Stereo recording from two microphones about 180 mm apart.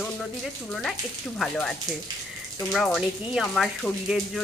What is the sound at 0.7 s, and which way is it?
Speech, centre (ahead or behind).